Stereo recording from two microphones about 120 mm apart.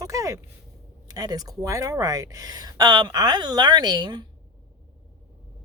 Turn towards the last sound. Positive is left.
turn(degrees=-40)  # may be behind; listen again after turning